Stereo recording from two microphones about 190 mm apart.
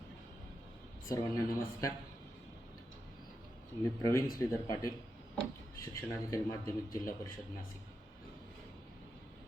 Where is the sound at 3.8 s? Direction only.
15° left (ahead or behind).